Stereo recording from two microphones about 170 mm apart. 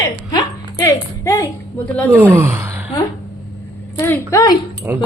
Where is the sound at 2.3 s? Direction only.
15° right (ahead or behind).